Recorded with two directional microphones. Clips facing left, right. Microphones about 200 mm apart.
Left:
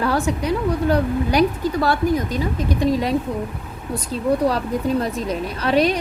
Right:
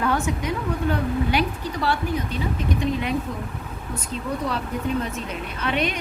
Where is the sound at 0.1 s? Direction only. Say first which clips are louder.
Left 4 dB; 35° left (ahead or behind).